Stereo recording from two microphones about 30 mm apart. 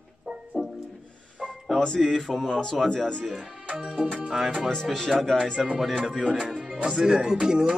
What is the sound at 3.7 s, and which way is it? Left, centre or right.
Music, right.